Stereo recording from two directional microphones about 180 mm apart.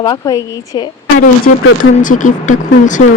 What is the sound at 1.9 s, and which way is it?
Speech, 45° left (ahead or behind).